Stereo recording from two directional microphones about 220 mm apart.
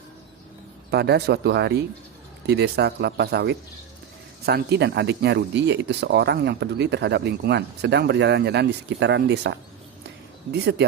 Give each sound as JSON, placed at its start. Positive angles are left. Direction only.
{"t": 0.9, "sound": "speech", "side_deg": -45}